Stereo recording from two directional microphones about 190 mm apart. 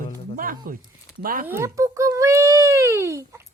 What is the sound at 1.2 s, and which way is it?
Speech, 50° right (ahead or behind).